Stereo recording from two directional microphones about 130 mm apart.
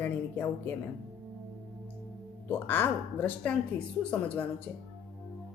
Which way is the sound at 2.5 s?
15° left (ahead or behind).